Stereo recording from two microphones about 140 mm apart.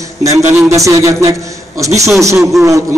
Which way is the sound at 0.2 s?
20° right (ahead or behind).